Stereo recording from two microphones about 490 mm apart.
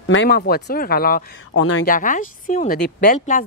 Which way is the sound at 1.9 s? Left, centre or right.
Centre.